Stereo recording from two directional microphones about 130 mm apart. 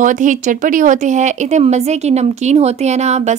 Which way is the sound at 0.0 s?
75° right (ahead or behind).